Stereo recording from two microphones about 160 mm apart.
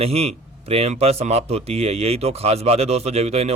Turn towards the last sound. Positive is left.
turn(degrees=-40)  # may be behind; listen again after turning